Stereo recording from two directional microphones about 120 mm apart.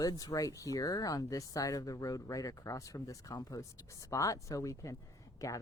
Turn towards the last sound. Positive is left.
turn(degrees=25)  # may be behind; listen again after turning